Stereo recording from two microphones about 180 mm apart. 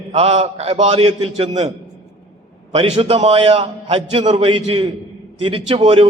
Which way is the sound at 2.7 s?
35° right (ahead or behind).